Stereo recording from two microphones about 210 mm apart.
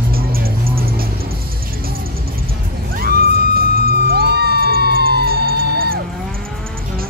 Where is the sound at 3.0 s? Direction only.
45° right (ahead or behind).